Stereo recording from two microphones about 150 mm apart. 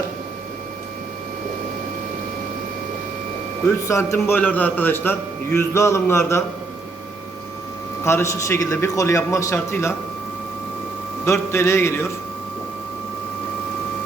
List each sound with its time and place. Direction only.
3.7 s a man's voice: 20° left (ahead or behind)
8.0 s a man's voice: 20° left (ahead or behind)
11.3 s a man's voice: 15° left (ahead or behind)